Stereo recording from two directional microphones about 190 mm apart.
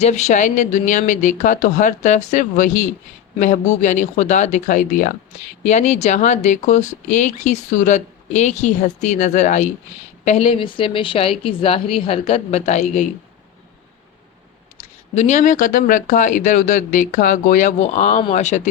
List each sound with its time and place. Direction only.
0.0 s a woman's voice: 35° left (ahead or behind)
15.1 s speech: 35° left (ahead or behind)